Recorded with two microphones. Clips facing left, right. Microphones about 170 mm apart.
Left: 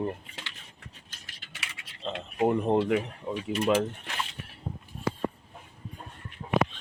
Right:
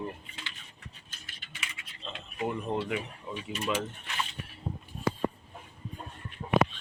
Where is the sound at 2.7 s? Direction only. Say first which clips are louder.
Left 7 dB; 50° left (ahead or behind).